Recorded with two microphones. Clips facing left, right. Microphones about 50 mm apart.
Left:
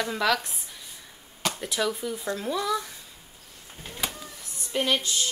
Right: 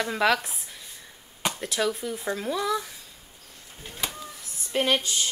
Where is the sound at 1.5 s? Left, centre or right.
Centre.